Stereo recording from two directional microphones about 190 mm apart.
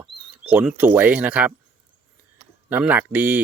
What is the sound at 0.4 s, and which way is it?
Speech, 10° right (ahead or behind).